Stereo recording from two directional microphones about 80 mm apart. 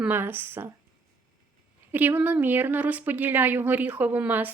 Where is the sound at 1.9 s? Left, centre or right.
Right.